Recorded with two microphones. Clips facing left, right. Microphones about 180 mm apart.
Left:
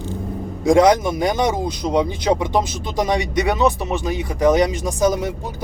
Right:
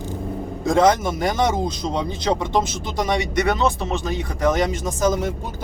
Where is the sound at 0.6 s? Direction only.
15° left (ahead or behind).